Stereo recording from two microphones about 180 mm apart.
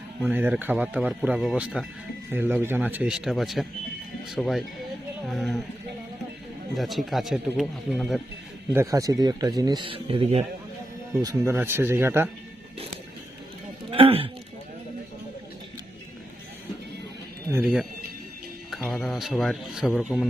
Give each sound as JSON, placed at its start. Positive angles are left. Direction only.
{"t": 0.2, "sound": "speech", "side_deg": -10}
{"t": 6.7, "sound": "speech", "side_deg": 0}
{"t": 8.7, "sound": "speech", "side_deg": -15}
{"t": 11.2, "sound": "speech", "side_deg": -15}
{"t": 13.9, "sound": "a sound", "side_deg": -30}
{"t": 17.5, "sound": "speech", "side_deg": -10}
{"t": 18.8, "sound": "a sound", "side_deg": 10}
{"t": 19.1, "sound": "speech", "side_deg": 0}